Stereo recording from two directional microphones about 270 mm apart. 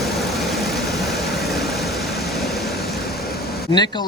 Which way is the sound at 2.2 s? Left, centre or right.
Centre.